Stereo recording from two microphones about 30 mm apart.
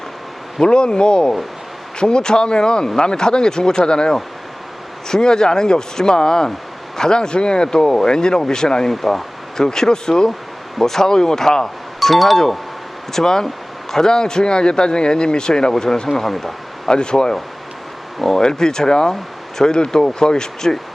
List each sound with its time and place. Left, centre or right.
0.6 s speech: left
8.9 s speech: centre
9.6 s speech: centre
10.8 s speech: centre
11.9 s speech: centre
13.1 s speech: centre
15.7 s speech: centre
16.9 s speech: left
18.2 s speech: centre